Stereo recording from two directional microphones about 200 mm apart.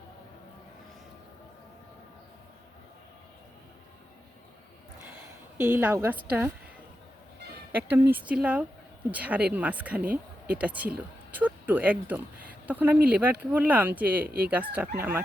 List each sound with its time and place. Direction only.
5.5 s a woman's voice: 15° right (ahead or behind)
7.7 s a woman's voice: 10° right (ahead or behind)
14.3 s speech: 50° right (ahead or behind)
14.5 s a woman's voice: 10° right (ahead or behind)